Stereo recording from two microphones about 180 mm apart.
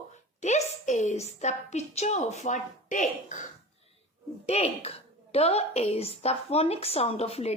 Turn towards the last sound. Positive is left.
turn(degrees=35)  # may be behind; listen again after turning